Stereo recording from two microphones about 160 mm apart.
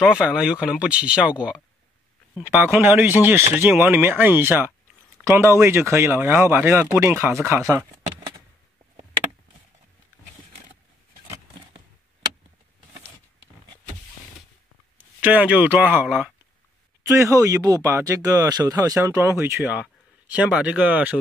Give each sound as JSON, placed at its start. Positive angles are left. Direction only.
{"t": 0.0, "sound": "speech", "side_deg": -5}
{"t": 15.1, "sound": "speech", "side_deg": -10}
{"t": 17.1, "sound": "speech", "side_deg": -20}